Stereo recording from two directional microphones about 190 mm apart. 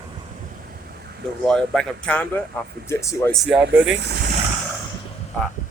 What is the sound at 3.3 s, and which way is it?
Speech, centre (ahead or behind).